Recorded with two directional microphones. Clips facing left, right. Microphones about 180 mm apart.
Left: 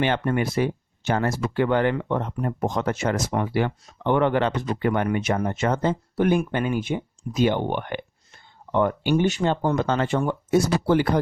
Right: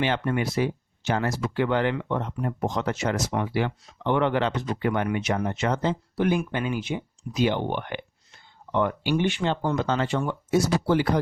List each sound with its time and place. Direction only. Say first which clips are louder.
0.0 s speech: left 2 dB; 50° left (ahead or behind)